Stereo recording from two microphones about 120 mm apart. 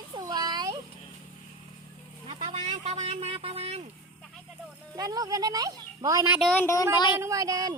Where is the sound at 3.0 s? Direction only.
55° right (ahead or behind).